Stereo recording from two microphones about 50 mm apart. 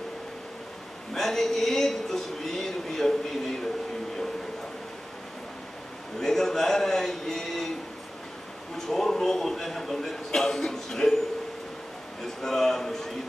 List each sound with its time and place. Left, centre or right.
1.1 s speech: centre
6.1 s a man's voice: centre
8.7 s a man's voice: centre
12.2 s a man's voice: centre